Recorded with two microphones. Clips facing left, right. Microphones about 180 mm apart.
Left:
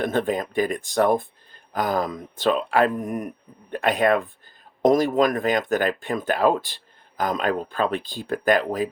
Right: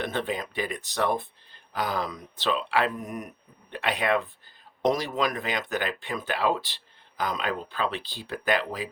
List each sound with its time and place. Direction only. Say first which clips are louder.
0.0 s speech: left 7 dB; 45° left (ahead or behind)